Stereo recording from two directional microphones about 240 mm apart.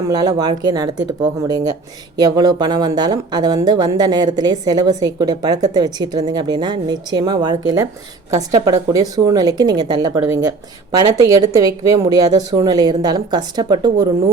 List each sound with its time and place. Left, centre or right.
0.1 s a woman's voice: centre